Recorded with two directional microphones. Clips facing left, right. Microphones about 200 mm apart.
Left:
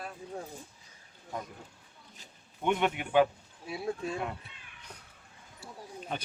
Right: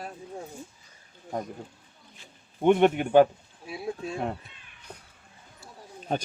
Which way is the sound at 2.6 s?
45° right (ahead or behind).